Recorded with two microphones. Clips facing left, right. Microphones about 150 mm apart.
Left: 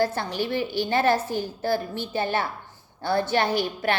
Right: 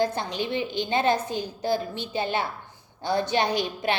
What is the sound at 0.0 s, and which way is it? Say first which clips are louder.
A woman's voice: left 1 dB; 20° right (ahead or behind).